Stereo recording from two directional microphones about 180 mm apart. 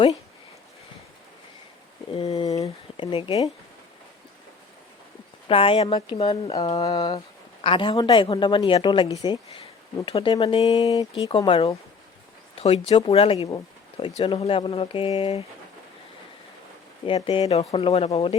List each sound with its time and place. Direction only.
2.1 s speech: 25° left (ahead or behind)
5.5 s speech: 30° left (ahead or behind)
17.1 s speech: 30° left (ahead or behind)